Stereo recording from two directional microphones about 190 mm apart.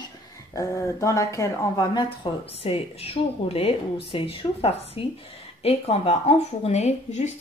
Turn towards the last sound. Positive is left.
turn(degrees=35)  # may be behind; listen again after turning